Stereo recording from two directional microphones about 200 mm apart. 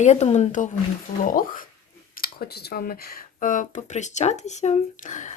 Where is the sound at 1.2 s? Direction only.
45° left (ahead or behind).